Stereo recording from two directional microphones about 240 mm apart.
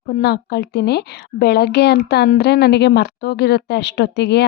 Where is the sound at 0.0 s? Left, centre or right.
Left.